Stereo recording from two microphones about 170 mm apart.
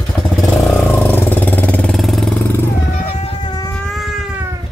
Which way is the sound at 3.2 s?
25° left (ahead or behind).